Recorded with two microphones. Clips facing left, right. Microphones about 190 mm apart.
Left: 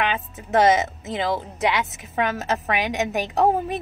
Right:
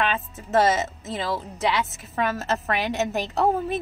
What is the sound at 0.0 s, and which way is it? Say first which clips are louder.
A woman's voice: left 1 dB; 15° left (ahead or behind).